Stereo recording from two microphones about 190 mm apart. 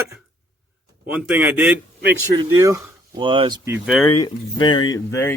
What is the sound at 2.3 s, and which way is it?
Speech, 20° right (ahead or behind).